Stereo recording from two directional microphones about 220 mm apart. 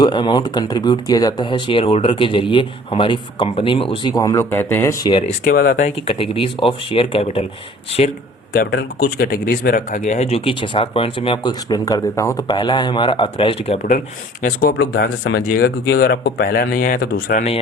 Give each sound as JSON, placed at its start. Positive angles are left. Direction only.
{"t": 0.0, "sound": "speech", "side_deg": 20}
{"t": 5.2, "sound": "speech", "side_deg": 40}
{"t": 8.5, "sound": "speech", "side_deg": 45}
{"t": 14.4, "sound": "speech", "side_deg": 45}